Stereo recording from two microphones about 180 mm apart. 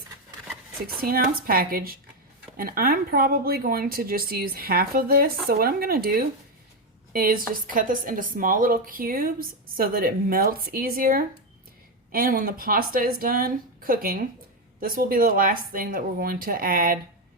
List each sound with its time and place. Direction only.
0.9 s a woman's voice: 55° right (ahead or behind)